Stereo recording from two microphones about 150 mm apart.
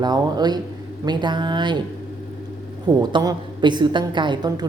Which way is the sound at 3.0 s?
30° right (ahead or behind).